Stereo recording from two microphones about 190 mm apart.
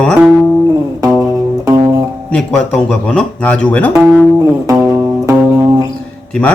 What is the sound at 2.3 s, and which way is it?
Speech, 5° left (ahead or behind).